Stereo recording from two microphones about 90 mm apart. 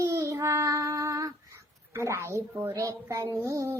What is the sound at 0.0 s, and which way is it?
Child singing, 35° right (ahead or behind).